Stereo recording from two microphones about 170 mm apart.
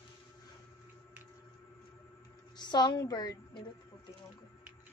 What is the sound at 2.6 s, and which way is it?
A woman's voice, 25° left (ahead or behind).